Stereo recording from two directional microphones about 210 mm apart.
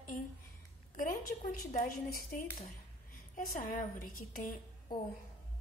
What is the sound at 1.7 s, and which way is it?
A woman's voice, 40° left (ahead or behind).